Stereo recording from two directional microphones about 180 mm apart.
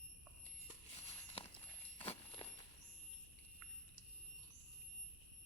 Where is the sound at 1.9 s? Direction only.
30° left (ahead or behind).